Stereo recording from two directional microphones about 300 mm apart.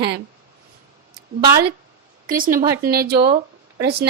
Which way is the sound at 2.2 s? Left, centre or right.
Right.